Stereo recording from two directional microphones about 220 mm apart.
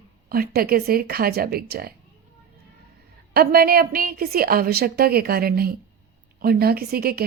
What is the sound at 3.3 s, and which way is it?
A woman's voice, 45° right (ahead or behind).